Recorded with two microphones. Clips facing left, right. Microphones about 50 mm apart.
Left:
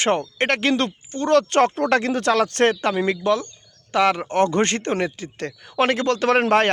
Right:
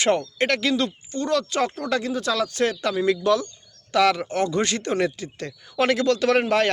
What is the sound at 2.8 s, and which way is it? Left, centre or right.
Speech, left.